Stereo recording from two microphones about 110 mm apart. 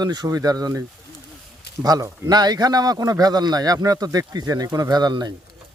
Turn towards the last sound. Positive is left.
turn(degrees=-40)  # may be behind; listen again after turning